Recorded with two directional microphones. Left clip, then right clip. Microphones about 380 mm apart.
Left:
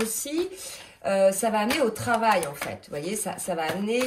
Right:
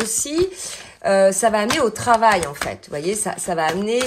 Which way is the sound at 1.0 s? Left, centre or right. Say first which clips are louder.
Right 7 dB; centre.